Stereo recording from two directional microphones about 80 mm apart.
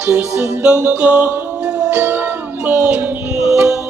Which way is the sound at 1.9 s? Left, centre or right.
Right.